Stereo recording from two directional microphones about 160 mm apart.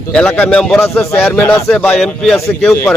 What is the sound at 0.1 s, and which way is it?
A man's voice, 5° left (ahead or behind).